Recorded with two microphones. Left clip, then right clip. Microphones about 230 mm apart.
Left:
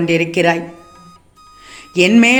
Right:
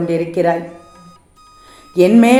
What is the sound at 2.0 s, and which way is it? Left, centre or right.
Speech, left.